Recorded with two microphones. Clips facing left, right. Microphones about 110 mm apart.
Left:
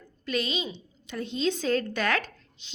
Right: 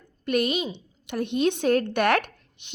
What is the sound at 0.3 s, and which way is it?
A woman's voice, 60° right (ahead or behind).